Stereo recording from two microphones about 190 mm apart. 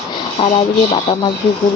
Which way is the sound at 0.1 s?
35° left (ahead or behind).